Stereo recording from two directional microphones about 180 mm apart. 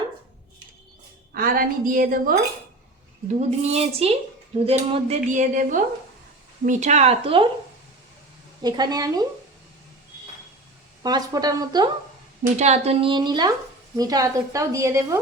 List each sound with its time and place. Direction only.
1.3 s a woman's voice: 55° right (ahead or behind)
3.2 s speech: 35° right (ahead or behind)
8.6 s a woman's voice: 20° right (ahead or behind)
11.0 s a woman's voice: 20° right (ahead or behind)
12.4 s a woman's voice: 40° right (ahead or behind); by 15.2 s 15° right (ahead or behind)